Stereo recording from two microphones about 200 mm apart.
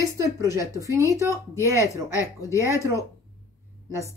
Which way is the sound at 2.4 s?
15° left (ahead or behind).